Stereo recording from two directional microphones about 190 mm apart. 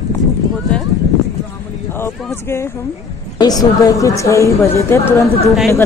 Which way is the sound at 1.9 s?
10° left (ahead or behind).